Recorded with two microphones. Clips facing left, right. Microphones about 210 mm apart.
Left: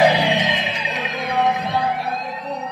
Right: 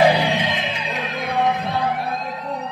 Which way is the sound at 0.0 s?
55° right (ahead or behind).